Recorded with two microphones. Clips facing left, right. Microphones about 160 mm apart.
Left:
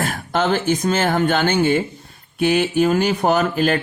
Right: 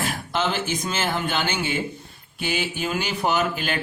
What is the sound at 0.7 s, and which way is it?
Speech, 45° left (ahead or behind).